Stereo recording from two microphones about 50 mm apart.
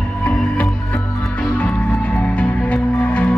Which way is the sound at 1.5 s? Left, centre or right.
Left.